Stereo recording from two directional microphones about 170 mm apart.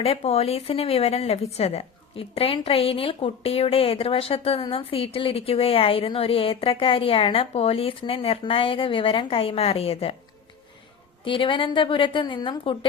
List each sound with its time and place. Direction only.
0.0 s speech: 35° left (ahead or behind)
11.3 s a woman's voice: 30° left (ahead or behind)